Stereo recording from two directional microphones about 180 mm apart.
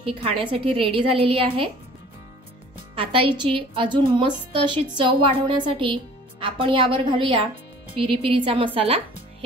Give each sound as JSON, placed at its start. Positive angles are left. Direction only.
{"t": 0.0, "sound": "a woman's voice", "side_deg": -30}
{"t": 3.0, "sound": "a woman's voice", "side_deg": -30}